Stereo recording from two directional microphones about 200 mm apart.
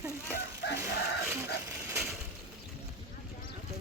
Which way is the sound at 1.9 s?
5° right (ahead or behind).